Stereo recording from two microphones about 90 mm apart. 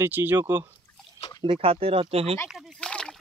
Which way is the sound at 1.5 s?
90° right.